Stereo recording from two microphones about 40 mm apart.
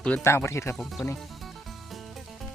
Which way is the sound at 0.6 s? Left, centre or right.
Left.